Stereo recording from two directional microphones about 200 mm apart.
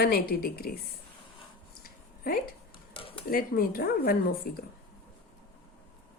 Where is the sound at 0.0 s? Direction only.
50° left (ahead or behind).